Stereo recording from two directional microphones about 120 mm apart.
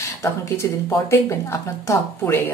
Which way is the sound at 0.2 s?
25° left (ahead or behind).